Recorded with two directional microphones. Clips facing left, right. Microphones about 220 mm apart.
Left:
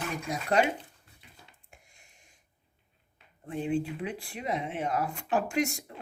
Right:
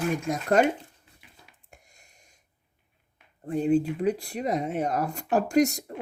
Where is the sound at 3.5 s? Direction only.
40° right (ahead or behind).